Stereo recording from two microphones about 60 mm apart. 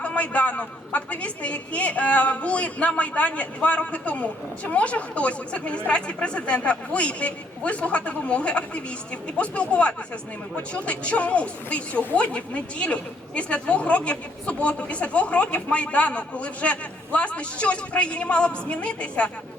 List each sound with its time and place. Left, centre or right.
0.0 s a man's voice: left